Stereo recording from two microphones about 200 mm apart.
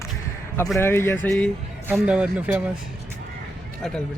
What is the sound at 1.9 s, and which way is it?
Speech, 5° right (ahead or behind).